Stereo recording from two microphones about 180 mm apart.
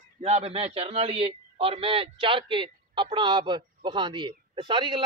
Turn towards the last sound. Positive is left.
turn(degrees=-25)  # may be behind; listen again after turning